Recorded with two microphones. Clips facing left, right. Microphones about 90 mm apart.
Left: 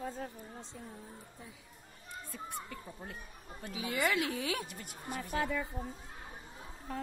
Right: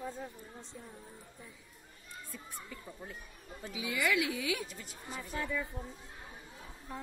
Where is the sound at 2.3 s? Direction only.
60° left (ahead or behind); by 4.7 s 40° left (ahead or behind).